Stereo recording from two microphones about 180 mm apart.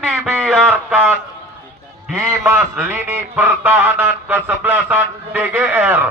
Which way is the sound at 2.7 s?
10° right (ahead or behind).